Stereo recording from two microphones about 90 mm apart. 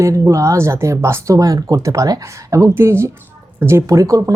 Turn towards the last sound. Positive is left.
turn(degrees=-40)  # may be behind; listen again after turning